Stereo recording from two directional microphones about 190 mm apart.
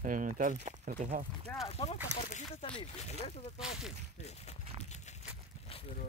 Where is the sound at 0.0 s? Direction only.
45° right (ahead or behind).